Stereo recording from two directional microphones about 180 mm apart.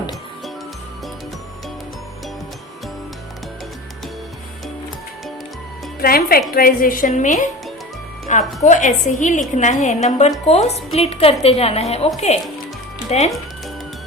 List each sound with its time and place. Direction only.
6.0 s a woman's voice: 55° left (ahead or behind); by 13.3 s 40° left (ahead or behind)